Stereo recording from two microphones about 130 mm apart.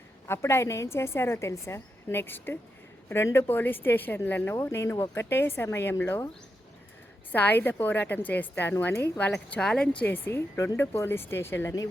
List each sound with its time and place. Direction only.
0.3 s a woman's voice: 20° left (ahead or behind)
7.3 s a woman's voice: 15° left (ahead or behind)
10.1 s a woman's voice: 15° left (ahead or behind)